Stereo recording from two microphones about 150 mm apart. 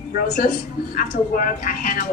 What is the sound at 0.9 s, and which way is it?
A woman's voice, 70° left (ahead or behind).